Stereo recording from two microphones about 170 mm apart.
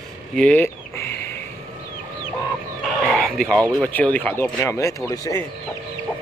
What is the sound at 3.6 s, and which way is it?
Speech, 10° left (ahead or behind).